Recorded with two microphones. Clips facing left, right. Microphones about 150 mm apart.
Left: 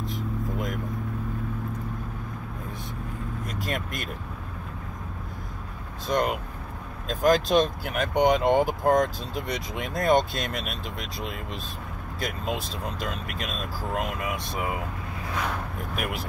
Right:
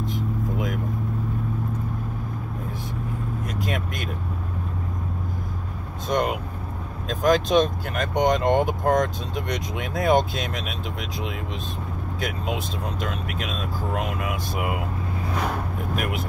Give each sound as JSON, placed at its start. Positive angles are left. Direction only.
{"t": 0.0, "sound": "vehicle", "side_deg": 0}
{"t": 3.4, "sound": "speech", "side_deg": 0}
{"t": 6.0, "sound": "speech", "side_deg": 0}
{"t": 16.0, "sound": "speech", "side_deg": 0}